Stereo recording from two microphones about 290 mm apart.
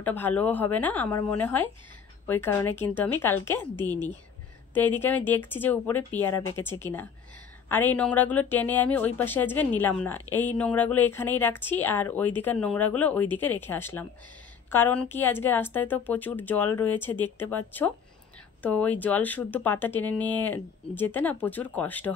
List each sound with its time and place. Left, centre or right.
0.0 s speech: centre